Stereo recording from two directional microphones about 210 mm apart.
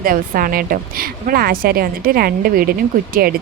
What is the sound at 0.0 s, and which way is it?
A woman's voice, 45° right (ahead or behind).